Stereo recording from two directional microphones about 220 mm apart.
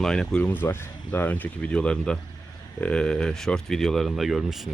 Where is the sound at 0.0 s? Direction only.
5° left (ahead or behind).